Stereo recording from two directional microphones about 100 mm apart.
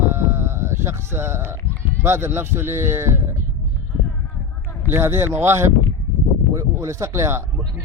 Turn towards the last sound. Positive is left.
turn(degrees=-30)  # may be behind; listen again after turning